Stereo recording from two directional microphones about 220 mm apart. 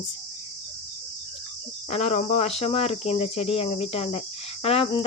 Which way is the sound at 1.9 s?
30° left (ahead or behind).